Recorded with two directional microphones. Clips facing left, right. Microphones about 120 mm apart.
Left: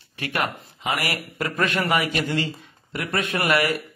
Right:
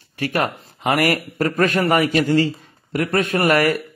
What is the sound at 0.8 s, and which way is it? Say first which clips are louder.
Speech: right 8 dB; 55° right (ahead or behind).